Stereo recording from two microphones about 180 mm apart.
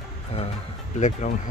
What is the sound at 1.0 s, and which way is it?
Speech, 40° left (ahead or behind).